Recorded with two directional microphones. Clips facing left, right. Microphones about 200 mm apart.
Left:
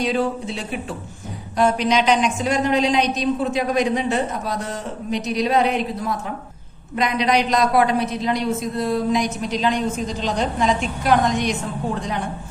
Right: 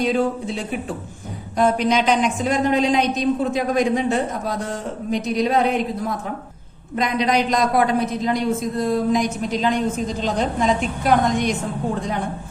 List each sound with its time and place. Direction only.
0.0 s a woman's voice: 50° right (ahead or behind)
1.7 s a woman's voice: 50° right (ahead or behind)
6.9 s a woman's voice: 45° right (ahead or behind)